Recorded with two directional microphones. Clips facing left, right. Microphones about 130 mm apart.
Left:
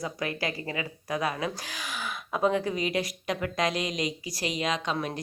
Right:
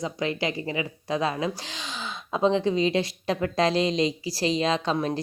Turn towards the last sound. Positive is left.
turn(degrees=-30)  # may be behind; listen again after turning